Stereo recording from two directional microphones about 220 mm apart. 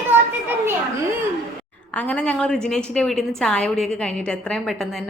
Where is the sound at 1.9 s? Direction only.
5° left (ahead or behind).